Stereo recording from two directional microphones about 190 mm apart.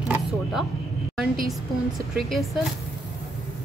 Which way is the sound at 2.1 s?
Centre (ahead or behind).